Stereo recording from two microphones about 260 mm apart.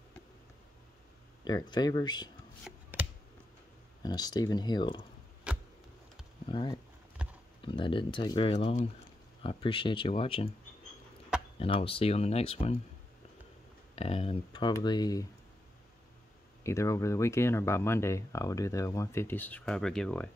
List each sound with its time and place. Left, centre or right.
1.4 s speech: centre
2.6 s a sound: centre
4.0 s speech: centre
5.5 s a sound: centre
6.5 s speech: centre
7.2 s horse: centre
7.6 s speech: centre
11.6 s speech: left
13.9 s speech: left
16.6 s speech: centre